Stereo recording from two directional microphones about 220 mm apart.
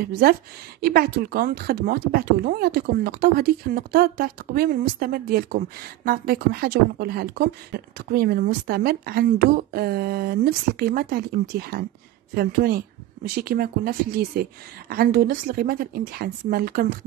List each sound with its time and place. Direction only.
0.0 s a woman's voice: 45° right (ahead or behind)